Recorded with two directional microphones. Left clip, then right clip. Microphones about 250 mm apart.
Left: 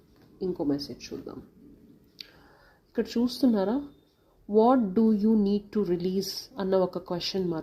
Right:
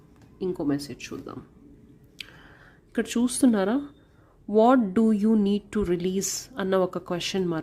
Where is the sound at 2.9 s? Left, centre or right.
Right.